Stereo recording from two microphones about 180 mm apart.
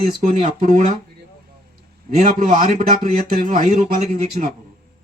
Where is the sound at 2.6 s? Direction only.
40° right (ahead or behind).